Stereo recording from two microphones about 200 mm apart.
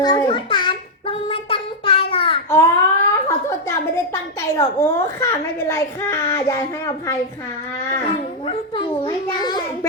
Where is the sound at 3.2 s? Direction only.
15° left (ahead or behind).